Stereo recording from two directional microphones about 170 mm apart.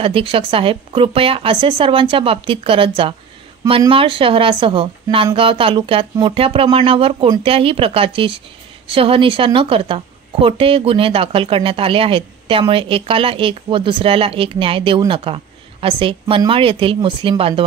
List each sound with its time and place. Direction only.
0.0 s a woman's voice: 30° right (ahead or behind)